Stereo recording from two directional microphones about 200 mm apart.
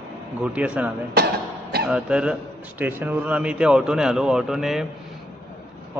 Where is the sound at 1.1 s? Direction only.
50° right (ahead or behind).